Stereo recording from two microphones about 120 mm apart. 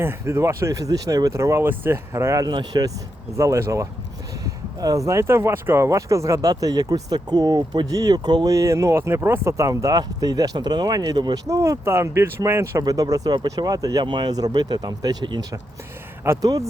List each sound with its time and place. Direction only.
0.0 s speech: 20° right (ahead or behind)
3.3 s speech: 25° right (ahead or behind)
11.4 s speech: 25° right (ahead or behind)
16.2 s speech: 25° right (ahead or behind)